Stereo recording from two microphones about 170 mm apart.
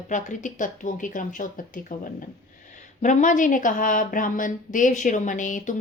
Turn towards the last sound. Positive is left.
turn(degrees=50)  # may be behind; listen again after turning